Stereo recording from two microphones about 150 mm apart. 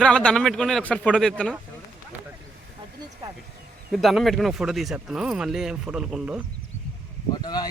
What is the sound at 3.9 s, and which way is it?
Speech, centre (ahead or behind).